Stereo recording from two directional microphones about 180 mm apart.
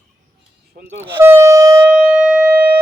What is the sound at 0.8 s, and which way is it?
Speech, 90° right.